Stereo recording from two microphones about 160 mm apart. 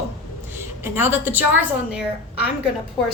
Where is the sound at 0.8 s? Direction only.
15° right (ahead or behind).